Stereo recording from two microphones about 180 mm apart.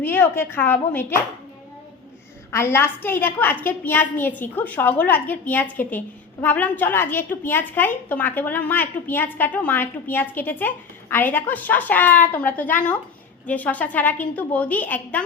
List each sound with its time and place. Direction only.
0.0 s a woman's voice: 10° left (ahead or behind)
2.5 s a woman's voice: 15° left (ahead or behind)